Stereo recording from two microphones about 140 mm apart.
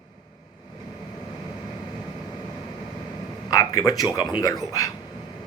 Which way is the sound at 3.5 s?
25° left (ahead or behind).